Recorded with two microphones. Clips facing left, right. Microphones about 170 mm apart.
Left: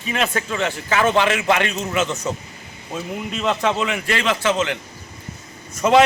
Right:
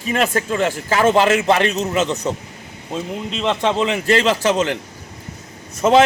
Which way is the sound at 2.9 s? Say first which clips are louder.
Right 2 dB; 25° right (ahead or behind).